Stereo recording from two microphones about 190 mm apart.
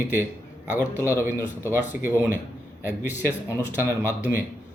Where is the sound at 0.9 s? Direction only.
15° left (ahead or behind).